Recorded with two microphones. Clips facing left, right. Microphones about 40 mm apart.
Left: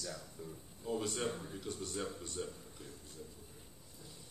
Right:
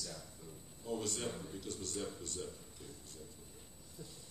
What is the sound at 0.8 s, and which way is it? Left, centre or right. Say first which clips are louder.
Speech: left 2 dB; centre.